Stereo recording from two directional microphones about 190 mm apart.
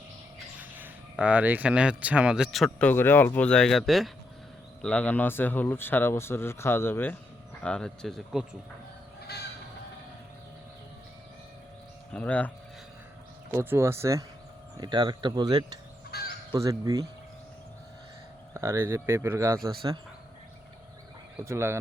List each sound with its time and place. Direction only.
0.6 s speech: 10° right (ahead or behind)
12.1 s speech: 5° left (ahead or behind)
13.5 s speech: 15° right (ahead or behind)
16.1 s crow: 55° left (ahead or behind)
16.5 s speech: 20° right (ahead or behind)
18.5 s speech: 15° right (ahead or behind)
21.4 s speech: 15° right (ahead or behind)